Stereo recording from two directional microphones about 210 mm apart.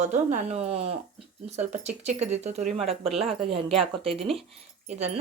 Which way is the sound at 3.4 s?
25° right (ahead or behind).